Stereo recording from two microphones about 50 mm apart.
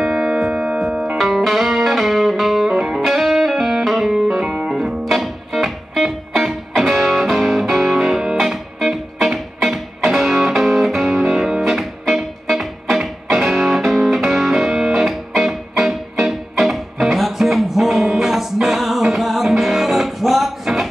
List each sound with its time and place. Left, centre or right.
0.0 s music: centre
1.1 s music: centre